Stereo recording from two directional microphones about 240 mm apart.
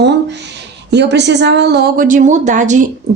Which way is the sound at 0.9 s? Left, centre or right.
Right.